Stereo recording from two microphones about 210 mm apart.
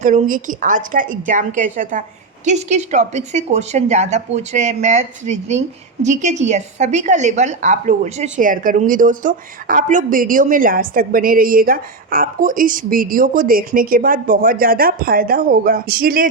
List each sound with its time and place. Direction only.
0.0 s a woman's voice: 35° right (ahead or behind)